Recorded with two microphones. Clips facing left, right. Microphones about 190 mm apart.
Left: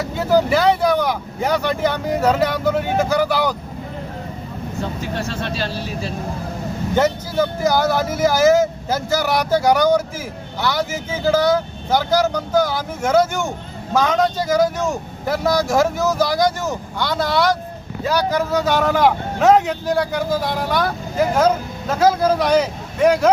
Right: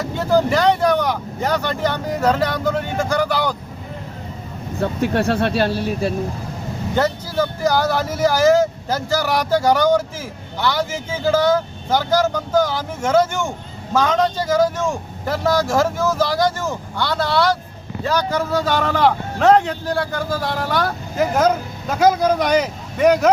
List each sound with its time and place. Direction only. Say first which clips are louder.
0.0 s speech: even; 10° left (ahead or behind)
4.8 s speech: right 7 dB; 60° right (ahead or behind)
6.9 s speech: left 2 dB; 15° left (ahead or behind)